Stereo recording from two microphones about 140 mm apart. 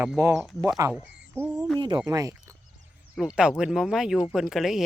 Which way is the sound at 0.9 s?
15° right (ahead or behind).